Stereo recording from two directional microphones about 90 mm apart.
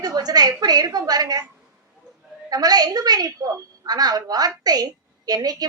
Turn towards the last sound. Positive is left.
turn(degrees=-45)  # may be behind; listen again after turning